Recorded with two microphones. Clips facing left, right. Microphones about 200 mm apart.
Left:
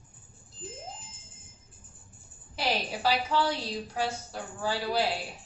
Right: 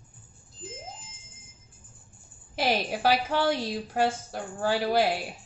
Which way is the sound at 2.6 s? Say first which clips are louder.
Right 4 dB; 50° right (ahead or behind).